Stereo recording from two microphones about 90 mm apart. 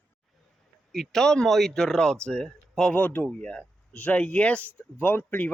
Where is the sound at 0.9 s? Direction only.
5° left (ahead or behind); by 5.5 s 20° left (ahead or behind).